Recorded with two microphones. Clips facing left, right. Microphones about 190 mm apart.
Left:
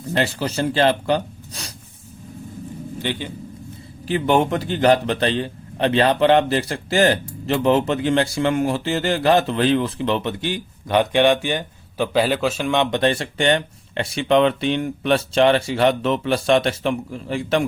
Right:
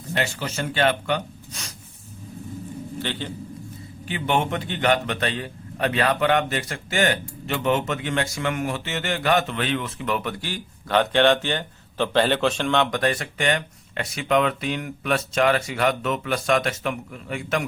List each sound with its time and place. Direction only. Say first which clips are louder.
0.1 s speech: left 5 dB; 35° left (ahead or behind)
3.0 s a man's voice: left 4 dB; 15° left (ahead or behind)
4.0 s a man's voice: left 6 dB; 35° left (ahead or behind); by 12.7 s 5° left (ahead or behind)
12.7 s speech: left 3 dB; 20° left (ahead or behind)